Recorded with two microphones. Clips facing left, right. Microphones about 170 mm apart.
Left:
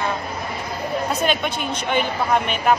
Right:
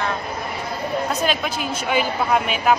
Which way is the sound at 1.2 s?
Centre (ahead or behind).